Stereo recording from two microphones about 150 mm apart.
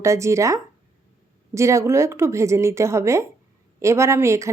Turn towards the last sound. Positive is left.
turn(degrees=-20)  # may be behind; listen again after turning